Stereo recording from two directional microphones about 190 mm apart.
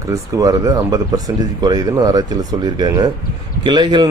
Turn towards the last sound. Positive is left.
turn(degrees=-25)  # may be behind; listen again after turning